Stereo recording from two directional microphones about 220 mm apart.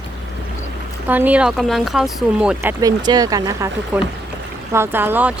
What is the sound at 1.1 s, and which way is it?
Speech, 5° right (ahead or behind).